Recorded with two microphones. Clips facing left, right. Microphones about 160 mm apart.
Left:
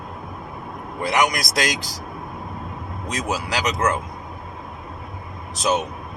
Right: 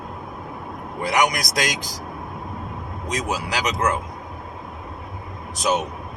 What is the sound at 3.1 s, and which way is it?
Speech, 15° right (ahead or behind).